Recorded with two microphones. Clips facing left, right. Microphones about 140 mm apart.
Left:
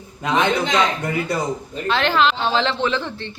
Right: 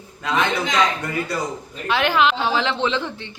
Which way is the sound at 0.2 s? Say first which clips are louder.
Left 3 dB; 20° left (ahead or behind).